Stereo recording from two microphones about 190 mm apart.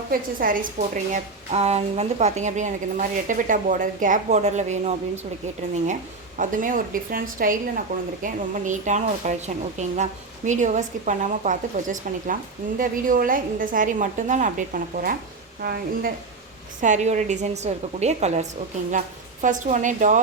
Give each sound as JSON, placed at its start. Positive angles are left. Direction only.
{"t": 0.1, "sound": "a woman's voice", "side_deg": -50}
{"t": 16.8, "sound": "a woman's voice", "side_deg": -40}